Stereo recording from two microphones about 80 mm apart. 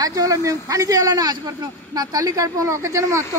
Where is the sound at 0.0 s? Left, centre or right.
Right.